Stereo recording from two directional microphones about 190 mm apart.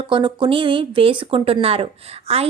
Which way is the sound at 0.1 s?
25° right (ahead or behind).